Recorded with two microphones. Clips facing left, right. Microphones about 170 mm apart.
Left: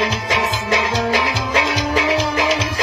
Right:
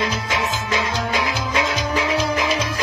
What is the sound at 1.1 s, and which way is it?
Music, 90° left.